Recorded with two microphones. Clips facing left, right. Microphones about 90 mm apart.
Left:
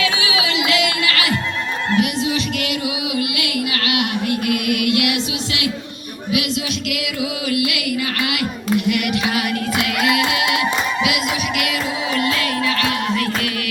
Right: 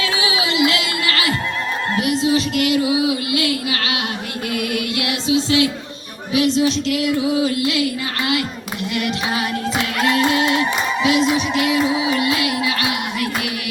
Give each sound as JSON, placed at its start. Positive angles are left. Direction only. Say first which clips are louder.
{"t": 0.0, "sound": "music", "louder": "even", "side_deg": -25}
{"t": 6.3, "sound": "a sound", "louder": "right 6 dB", "side_deg": -30}
{"t": 8.3, "sound": "speech", "louder": "left 2 dB", "side_deg": -25}
{"t": 10.0, "sound": "music", "louder": "right 4 dB", "side_deg": -35}
{"t": 11.0, "sound": "a sound", "louder": "right 4 dB", "side_deg": -30}
{"t": 12.1, "sound": "music", "louder": "right 1 dB", "side_deg": -20}